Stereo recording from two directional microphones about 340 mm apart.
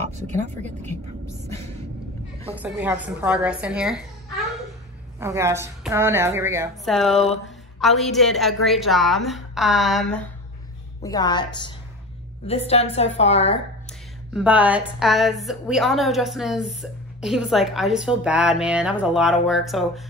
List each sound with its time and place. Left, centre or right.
0.3 s speech: right
2.5 s a woman's voice: centre
5.2 s a woman's voice: centre
14.3 s a woman's voice: centre